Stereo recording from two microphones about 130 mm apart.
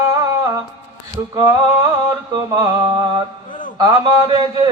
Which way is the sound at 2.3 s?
30° right (ahead or behind).